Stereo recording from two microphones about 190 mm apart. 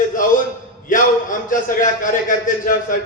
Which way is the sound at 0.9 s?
45° left (ahead or behind).